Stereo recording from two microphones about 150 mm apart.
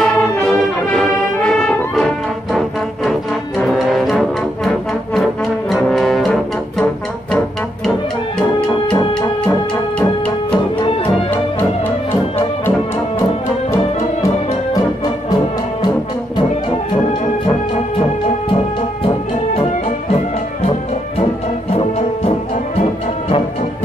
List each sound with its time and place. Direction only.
0.0 s brass instrument: 5° left (ahead or behind)
3.1 s brass instrument: centre (ahead or behind)
8.4 s music: 5° left (ahead or behind)
8.9 s music: 25° left (ahead or behind)
9.5 s music: 10° left (ahead or behind)
10.8 s music: 35° left (ahead or behind)